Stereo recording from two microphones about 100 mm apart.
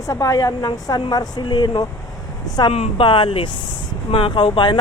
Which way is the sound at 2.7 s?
75° left (ahead or behind).